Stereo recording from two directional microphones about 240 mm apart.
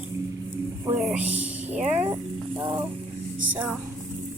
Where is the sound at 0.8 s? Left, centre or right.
Centre.